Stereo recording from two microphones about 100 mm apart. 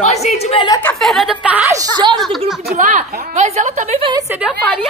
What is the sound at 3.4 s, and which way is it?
Speech, 90° right.